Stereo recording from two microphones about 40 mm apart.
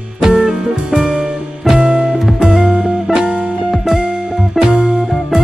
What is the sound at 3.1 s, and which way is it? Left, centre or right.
Music, centre.